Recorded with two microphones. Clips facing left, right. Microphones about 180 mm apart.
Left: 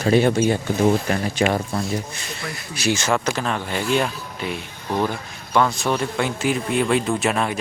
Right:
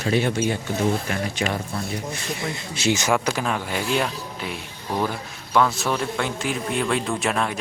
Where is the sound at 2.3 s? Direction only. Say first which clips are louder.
Right 2 dB; 20° right (ahead or behind).